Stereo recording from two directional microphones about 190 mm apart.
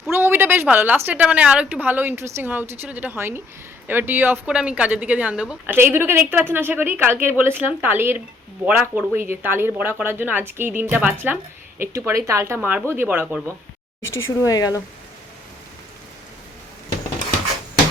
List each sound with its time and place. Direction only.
0.1 s speech: 10° right (ahead or behind)
14.0 s speech: 90° left
14.4 s speech: 20° left (ahead or behind)